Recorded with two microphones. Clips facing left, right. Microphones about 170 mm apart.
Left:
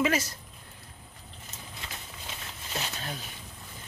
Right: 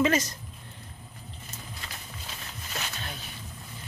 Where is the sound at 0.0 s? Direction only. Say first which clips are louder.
Right 3 dB; 5° left (ahead or behind).